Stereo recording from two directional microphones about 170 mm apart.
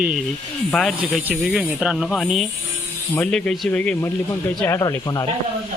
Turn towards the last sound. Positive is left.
turn(degrees=20)  # may be behind; listen again after turning